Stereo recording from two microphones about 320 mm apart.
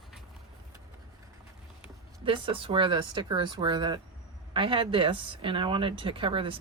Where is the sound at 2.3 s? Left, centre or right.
Centre.